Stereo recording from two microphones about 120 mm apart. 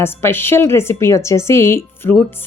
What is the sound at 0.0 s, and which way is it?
A woman's voice, 20° left (ahead or behind).